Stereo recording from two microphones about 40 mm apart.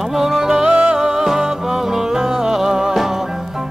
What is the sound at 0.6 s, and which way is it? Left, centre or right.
Music, right.